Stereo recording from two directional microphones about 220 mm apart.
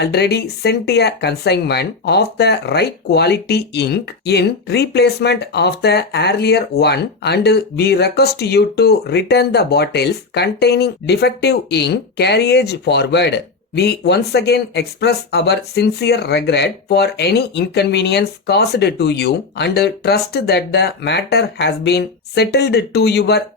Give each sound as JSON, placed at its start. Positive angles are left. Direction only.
{"t": 0.0, "sound": "speech", "side_deg": 50}